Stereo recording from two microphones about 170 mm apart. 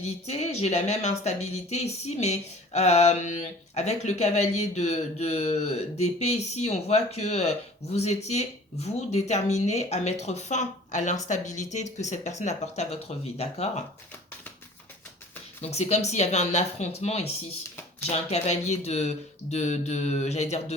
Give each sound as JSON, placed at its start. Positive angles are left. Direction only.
{"t": 0.0, "sound": "speech", "side_deg": 40}
{"t": 15.6, "sound": "speech", "side_deg": 40}